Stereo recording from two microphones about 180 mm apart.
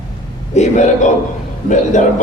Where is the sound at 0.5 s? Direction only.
40° left (ahead or behind).